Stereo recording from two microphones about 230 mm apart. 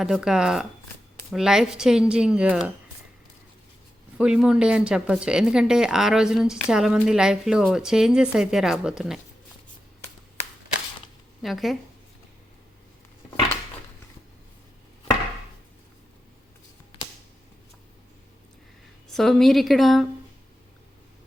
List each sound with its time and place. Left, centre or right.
0.0 s speech: centre
4.2 s speech: centre
11.4 s speech: centre
19.1 s speech: centre